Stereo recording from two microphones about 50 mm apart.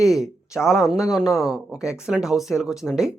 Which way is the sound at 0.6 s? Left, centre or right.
Centre.